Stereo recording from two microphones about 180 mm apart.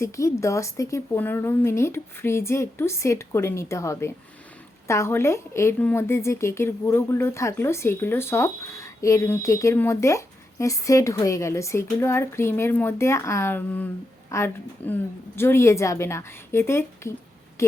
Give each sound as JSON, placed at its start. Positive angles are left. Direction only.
{"t": 0.0, "sound": "a woman's voice", "side_deg": 15}